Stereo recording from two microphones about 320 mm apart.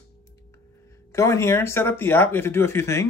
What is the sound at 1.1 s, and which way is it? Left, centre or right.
Speech, centre.